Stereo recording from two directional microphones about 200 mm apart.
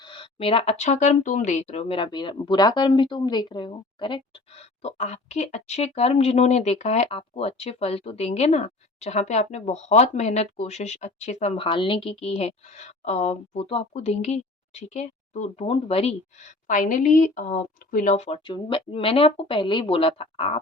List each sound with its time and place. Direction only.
0.0 s speech: 25° left (ahead or behind)